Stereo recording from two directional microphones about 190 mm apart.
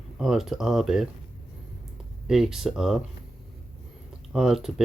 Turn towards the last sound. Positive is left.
turn(degrees=0)  # may be behind; listen again after turning